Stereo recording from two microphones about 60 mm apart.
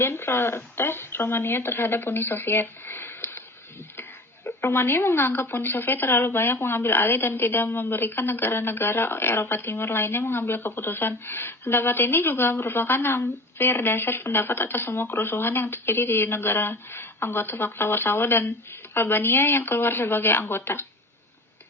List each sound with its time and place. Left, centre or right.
0.0 s speech: left
4.4 s speech: left